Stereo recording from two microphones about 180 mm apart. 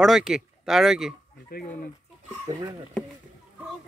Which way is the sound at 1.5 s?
55° left (ahead or behind).